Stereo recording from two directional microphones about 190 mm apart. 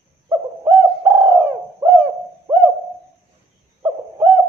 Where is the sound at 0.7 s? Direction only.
15° right (ahead or behind).